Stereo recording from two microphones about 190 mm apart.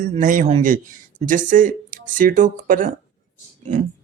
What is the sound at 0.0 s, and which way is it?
Speech, 45° right (ahead or behind).